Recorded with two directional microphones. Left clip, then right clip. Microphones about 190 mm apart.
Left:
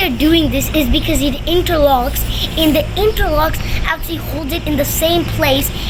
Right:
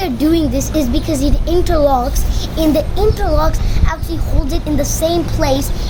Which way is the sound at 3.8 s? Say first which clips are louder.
Left 3 dB; centre (ahead or behind).